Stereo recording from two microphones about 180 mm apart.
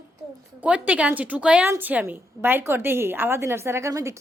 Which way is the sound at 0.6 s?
5° right (ahead or behind).